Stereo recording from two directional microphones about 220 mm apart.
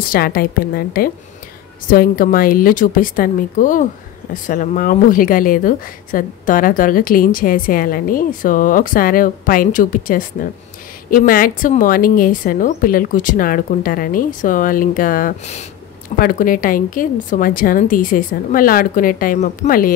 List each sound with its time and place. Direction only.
0.0 s a woman's voice: 40° left (ahead or behind)